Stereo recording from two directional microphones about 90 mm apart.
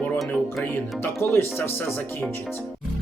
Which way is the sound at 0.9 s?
25° left (ahead or behind).